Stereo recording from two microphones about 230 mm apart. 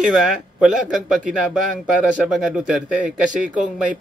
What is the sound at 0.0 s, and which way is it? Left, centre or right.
Speech, centre.